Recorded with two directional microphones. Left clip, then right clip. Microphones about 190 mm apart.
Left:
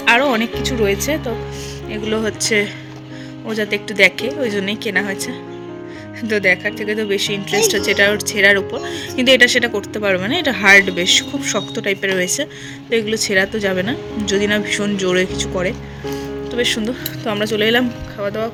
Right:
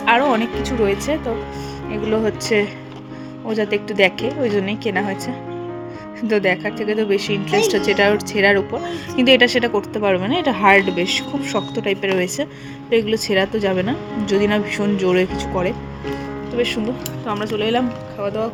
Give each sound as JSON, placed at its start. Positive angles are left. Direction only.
{"t": 0.0, "sound": "speech", "side_deg": 5}
{"t": 16.6, "sound": "speech", "side_deg": 5}
{"t": 17.2, "sound": "speech", "side_deg": 15}